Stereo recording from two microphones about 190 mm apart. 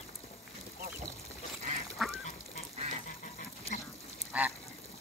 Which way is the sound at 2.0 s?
Centre (ahead or behind).